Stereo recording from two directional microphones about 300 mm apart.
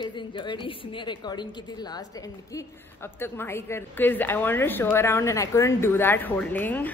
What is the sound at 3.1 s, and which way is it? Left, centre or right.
A woman's voice, centre.